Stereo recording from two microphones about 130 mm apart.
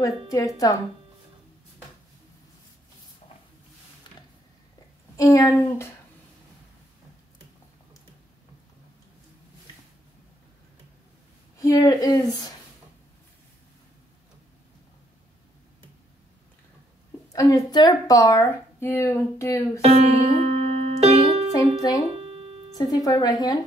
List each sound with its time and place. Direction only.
0.6 s speech: 30° left (ahead or behind)
4.1 s a sound: 35° left (ahead or behind)
5.1 s speech: 25° left (ahead or behind)
11.5 s speech: 25° left (ahead or behind)
17.3 s speech: 25° left (ahead or behind)
19.8 s music: 50° right (ahead or behind)
21.5 s speech: 30° left (ahead or behind)
22.1 s music: 50° right (ahead or behind)
22.8 s a woman's voice: 30° left (ahead or behind)